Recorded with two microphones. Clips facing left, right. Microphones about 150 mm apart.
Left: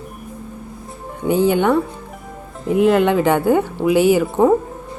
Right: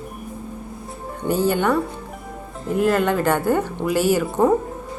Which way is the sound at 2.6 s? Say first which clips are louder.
Left 5 dB; centre (ahead or behind).